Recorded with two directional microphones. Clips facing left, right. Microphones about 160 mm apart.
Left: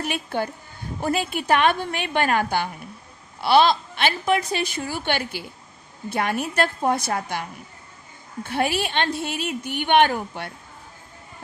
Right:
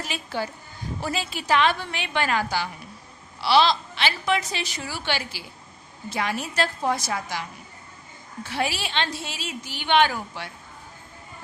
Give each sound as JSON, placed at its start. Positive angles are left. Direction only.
{"t": 0.0, "sound": "a woman's voice", "side_deg": 55}
{"t": 8.4, "sound": "a woman's voice", "side_deg": 55}